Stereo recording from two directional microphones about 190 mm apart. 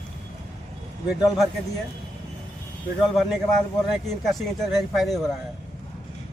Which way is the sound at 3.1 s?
Centre (ahead or behind).